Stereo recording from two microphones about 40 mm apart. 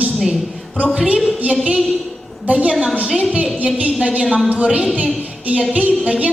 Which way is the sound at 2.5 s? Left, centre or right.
Right.